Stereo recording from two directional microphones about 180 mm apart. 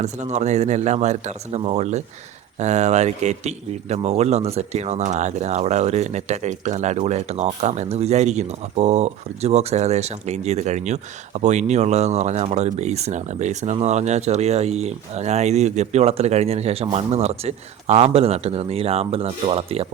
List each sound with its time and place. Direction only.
0.0 s speech: 40° right (ahead or behind)